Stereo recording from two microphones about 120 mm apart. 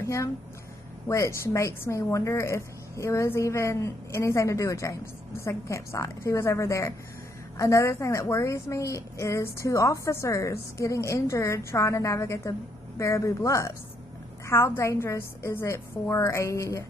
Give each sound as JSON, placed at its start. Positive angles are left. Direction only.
{"t": 0.0, "sound": "a woman's voice", "side_deg": 25}